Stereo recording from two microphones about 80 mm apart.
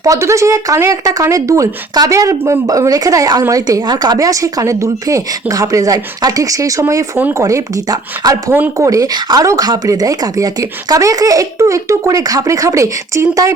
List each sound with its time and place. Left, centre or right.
0.0 s speech: right